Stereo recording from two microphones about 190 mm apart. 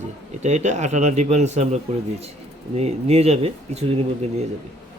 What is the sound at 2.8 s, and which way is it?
Speech, 35° right (ahead or behind).